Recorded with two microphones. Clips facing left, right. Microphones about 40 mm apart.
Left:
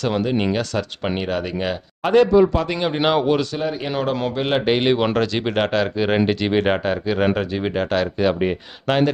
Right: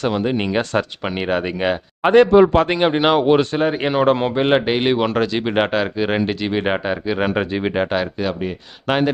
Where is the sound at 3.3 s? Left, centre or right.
Right.